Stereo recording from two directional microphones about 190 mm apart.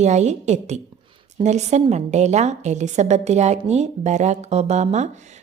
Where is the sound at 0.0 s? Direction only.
35° right (ahead or behind).